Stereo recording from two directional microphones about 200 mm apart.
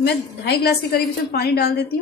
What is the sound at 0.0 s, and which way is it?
A woman's voice, 55° left (ahead or behind).